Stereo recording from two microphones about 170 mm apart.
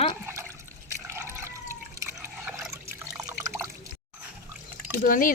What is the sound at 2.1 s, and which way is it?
Water, 5° right (ahead or behind).